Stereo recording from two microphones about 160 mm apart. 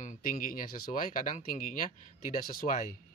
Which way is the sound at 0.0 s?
55° left (ahead or behind).